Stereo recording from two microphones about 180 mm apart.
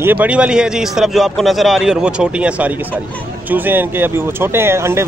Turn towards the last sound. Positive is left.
turn(degrees=-15)  # may be behind; listen again after turning